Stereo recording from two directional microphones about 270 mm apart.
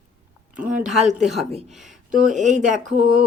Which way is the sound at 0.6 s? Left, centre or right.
Centre.